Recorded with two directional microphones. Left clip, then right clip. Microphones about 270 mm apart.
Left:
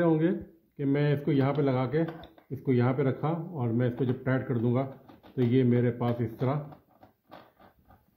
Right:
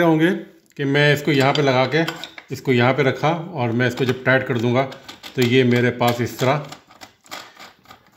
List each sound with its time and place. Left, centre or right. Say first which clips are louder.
0.0 s speech: right 9 dB; right